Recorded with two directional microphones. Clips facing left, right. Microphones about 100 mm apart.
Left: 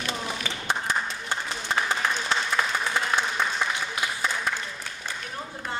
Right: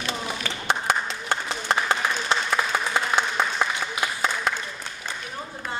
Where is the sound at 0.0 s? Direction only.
75° right (ahead or behind).